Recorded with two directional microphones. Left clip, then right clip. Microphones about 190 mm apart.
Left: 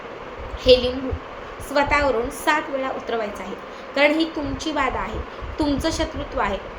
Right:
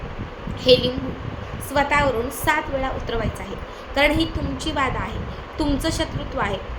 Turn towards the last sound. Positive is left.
turn(degrees=-5)  # may be behind; listen again after turning